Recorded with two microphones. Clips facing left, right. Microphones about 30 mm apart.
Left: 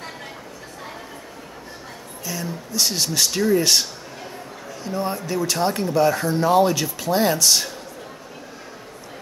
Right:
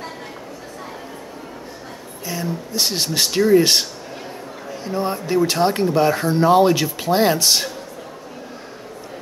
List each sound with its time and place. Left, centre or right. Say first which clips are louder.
2.3 s speech: right 4 dB; right
4.8 s speech: right 3 dB; right